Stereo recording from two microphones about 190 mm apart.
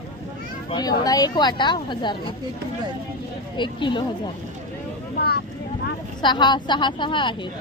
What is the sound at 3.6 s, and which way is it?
Speech, 25° left (ahead or behind).